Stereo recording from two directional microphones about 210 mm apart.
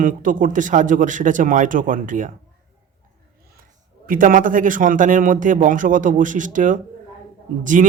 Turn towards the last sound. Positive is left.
turn(degrees=-40)  # may be behind; listen again after turning